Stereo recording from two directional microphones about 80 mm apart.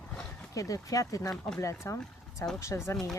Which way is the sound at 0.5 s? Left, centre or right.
Left.